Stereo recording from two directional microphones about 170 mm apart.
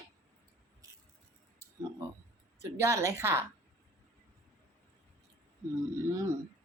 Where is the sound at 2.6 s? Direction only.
15° right (ahead or behind).